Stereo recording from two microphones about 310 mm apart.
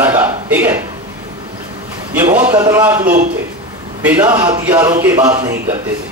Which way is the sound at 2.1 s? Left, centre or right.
Centre.